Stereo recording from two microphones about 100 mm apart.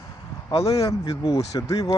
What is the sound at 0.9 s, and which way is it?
Speech, 35° left (ahead or behind).